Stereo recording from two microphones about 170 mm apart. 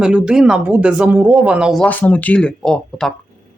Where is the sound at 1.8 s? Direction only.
10° left (ahead or behind).